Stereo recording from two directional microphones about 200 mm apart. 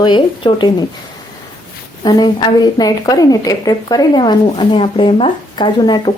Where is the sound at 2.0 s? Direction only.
20° left (ahead or behind).